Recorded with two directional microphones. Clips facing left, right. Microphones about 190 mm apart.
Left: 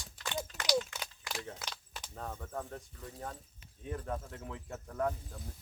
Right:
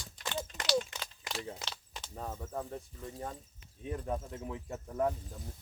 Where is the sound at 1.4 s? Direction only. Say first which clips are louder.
Right 4 dB; 15° right (ahead or behind).